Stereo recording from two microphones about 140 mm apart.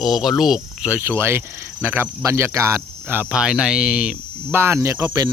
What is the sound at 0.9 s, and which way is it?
Speech, 15° right (ahead or behind).